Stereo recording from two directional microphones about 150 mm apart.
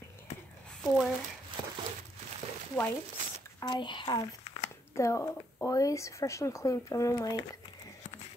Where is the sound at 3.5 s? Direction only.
30° left (ahead or behind).